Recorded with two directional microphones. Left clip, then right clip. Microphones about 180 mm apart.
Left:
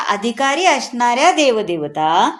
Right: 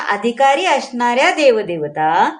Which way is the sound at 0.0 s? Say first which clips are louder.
Right 3 dB; 40° left (ahead or behind).